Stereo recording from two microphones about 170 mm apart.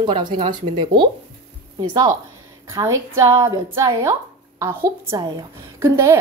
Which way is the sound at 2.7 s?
15° right (ahead or behind).